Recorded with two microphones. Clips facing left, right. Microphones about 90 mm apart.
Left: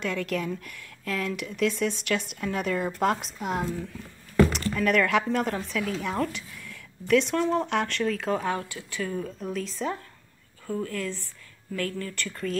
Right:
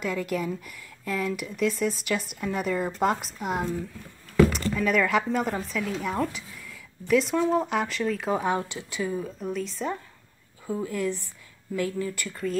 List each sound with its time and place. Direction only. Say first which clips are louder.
0.0 s speech: right 1 dB; 5° right (ahead or behind)
4.4 s a sound: right 1 dB; centre (ahead or behind)
4.7 s speech: left 2 dB; centre (ahead or behind)
8.4 s speech: right 3 dB; 20° right (ahead or behind)
9.1 s speech: right 1 dB; 5° right (ahead or behind)
10.7 s speech: right 2 dB; 15° right (ahead or behind)